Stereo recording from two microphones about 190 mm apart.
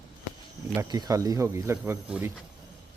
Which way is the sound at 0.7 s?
20° right (ahead or behind).